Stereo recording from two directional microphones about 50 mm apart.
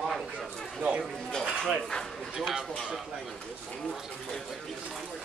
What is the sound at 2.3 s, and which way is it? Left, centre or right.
Speech, centre.